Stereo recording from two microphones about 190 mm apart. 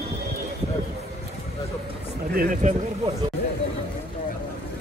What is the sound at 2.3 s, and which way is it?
Speech, 45° right (ahead or behind).